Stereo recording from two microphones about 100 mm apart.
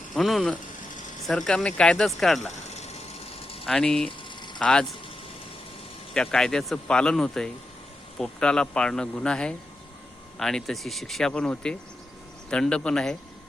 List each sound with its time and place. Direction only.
0.1 s speech: centre (ahead or behind)
2.6 s a sound: 90° left; by 3.7 s 70° left (ahead or behind)
3.7 s speech: 5° left (ahead or behind)
6.1 s speech: 5° left (ahead or behind)